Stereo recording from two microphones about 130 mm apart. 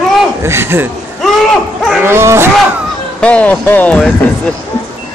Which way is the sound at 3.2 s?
10° left (ahead or behind).